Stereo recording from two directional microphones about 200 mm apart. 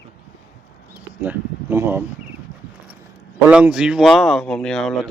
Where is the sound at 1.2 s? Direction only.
10° right (ahead or behind).